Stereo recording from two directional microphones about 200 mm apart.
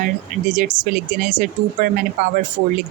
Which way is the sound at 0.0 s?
40° right (ahead or behind).